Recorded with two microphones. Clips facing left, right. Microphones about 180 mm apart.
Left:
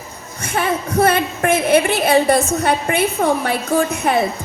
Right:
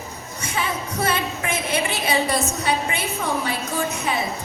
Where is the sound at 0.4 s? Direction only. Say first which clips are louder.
Left 7 dB; 55° left (ahead or behind).